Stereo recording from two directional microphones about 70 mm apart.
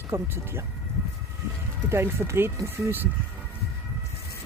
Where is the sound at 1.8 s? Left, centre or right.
Right.